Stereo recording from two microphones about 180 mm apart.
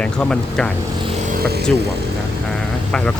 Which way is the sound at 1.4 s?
60° right (ahead or behind).